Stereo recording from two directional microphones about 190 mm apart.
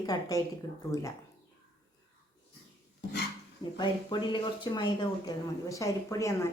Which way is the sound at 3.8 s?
25° left (ahead or behind).